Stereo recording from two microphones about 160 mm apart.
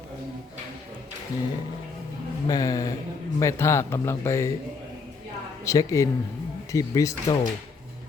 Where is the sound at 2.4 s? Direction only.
25° left (ahead or behind).